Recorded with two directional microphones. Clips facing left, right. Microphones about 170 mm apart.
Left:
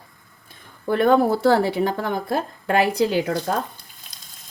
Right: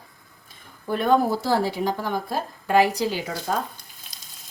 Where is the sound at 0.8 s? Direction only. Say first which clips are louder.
Left 4 dB; 60° left (ahead or behind).